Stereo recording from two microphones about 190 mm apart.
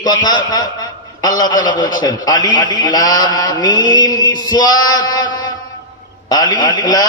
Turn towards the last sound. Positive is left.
turn(degrees=20)  # may be behind; listen again after turning